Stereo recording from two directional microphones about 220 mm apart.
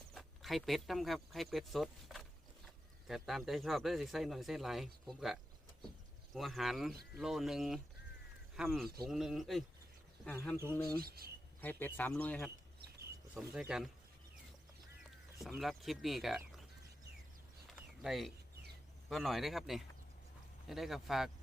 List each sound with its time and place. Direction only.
0.1 s speech: centre (ahead or behind)
11.0 s speech: 45° right (ahead or behind)
11.6 s speech: 10° left (ahead or behind)
15.4 s speech: centre (ahead or behind)
18.0 s speech: centre (ahead or behind)